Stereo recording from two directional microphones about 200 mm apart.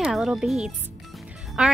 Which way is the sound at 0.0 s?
Centre (ahead or behind).